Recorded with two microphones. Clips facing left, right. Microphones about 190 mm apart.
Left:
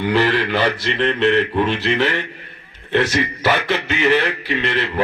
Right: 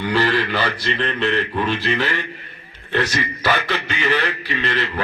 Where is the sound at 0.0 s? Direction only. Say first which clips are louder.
Left 2 dB; 20° left (ahead or behind).